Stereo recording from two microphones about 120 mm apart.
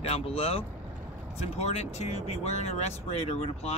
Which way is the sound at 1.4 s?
65° left (ahead or behind).